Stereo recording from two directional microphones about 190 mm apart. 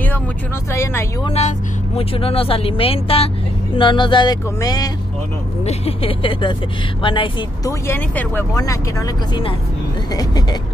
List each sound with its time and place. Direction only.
0.7 s speech: 15° left (ahead or behind)
1.2 s speech: 35° left (ahead or behind)
5.7 s speech: 30° left (ahead or behind)
7.8 s speech: 10° left (ahead or behind)